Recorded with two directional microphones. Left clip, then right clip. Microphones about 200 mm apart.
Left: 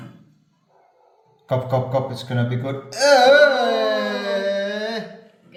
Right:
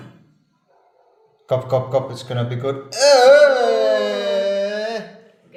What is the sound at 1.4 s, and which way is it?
Music, 20° right (ahead or behind).